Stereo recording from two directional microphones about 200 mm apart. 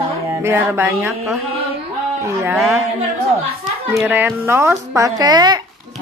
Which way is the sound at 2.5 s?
Centre (ahead or behind).